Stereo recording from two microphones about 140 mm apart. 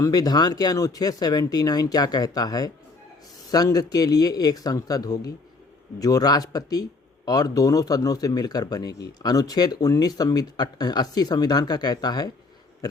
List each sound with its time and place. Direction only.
0.0 s speech: 25° left (ahead or behind)